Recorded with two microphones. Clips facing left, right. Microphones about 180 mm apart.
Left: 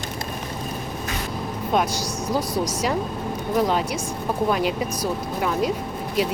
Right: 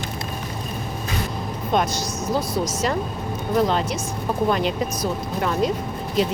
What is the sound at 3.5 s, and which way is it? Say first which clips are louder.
Speech: right 1 dB; 10° left (ahead or behind).